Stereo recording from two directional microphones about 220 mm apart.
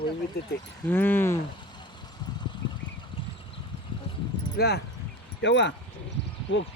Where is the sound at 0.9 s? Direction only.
10° left (ahead or behind).